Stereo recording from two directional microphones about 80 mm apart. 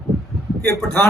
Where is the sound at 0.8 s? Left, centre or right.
Centre.